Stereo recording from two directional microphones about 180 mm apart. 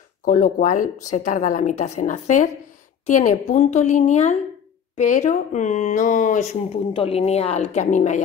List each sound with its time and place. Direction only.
0.2 s speech: 45° left (ahead or behind)